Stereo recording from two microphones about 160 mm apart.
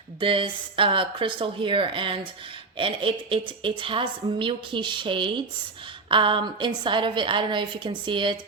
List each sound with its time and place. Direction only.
0.2 s a woman's voice: 35° right (ahead or behind)